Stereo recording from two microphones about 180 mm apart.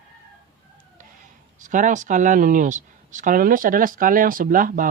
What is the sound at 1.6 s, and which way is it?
Speech, 45° right (ahead or behind).